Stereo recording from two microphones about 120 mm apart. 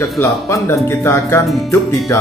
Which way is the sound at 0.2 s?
20° left (ahead or behind).